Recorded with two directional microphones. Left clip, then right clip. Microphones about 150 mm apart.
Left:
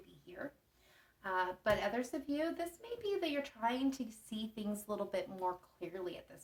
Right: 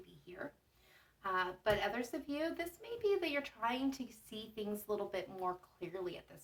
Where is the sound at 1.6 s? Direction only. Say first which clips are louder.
Left 1 dB; 35° left (ahead or behind).